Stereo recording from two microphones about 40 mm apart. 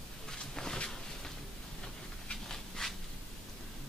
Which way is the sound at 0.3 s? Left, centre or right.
Centre.